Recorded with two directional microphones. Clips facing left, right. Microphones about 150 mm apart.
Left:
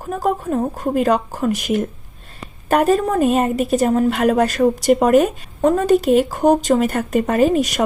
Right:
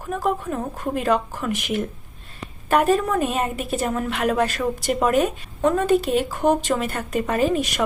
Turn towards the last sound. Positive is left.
turn(degrees=45)  # may be behind; listen again after turning